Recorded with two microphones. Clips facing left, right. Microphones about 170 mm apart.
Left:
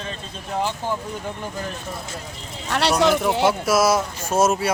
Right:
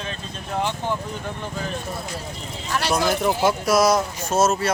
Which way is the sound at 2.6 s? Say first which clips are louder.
Left 4 dB; 70° left (ahead or behind).